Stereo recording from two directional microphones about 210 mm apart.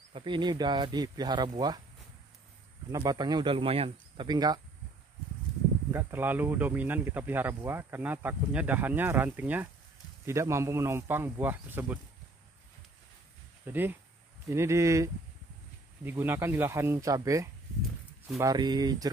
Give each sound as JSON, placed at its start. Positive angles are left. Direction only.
{"t": 0.1, "sound": "speech", "side_deg": -25}
{"t": 2.9, "sound": "speech", "side_deg": -20}
{"t": 5.9, "sound": "speech", "side_deg": -10}
{"t": 13.7, "sound": "speech", "side_deg": -10}